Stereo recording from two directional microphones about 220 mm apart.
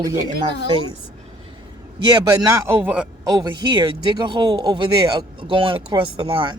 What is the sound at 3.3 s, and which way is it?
Speech, 20° right (ahead or behind).